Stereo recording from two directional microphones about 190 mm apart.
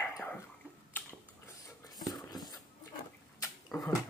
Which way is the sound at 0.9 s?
15° left (ahead or behind).